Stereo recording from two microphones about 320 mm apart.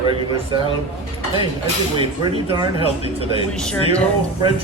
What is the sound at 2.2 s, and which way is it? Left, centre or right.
Speech, centre.